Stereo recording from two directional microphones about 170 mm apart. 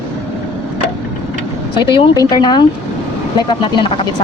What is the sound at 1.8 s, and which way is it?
Speech, 25° left (ahead or behind).